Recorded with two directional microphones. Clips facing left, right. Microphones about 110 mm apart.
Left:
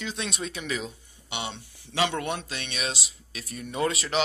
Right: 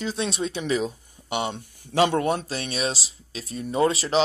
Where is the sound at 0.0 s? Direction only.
35° right (ahead or behind).